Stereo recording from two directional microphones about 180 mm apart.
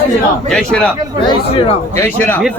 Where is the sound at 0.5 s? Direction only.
5° left (ahead or behind).